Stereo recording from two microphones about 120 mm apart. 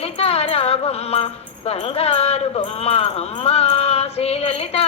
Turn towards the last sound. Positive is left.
turn(degrees=55)  # may be behind; listen again after turning